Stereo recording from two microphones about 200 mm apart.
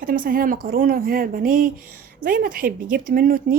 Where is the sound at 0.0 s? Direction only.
45° right (ahead or behind).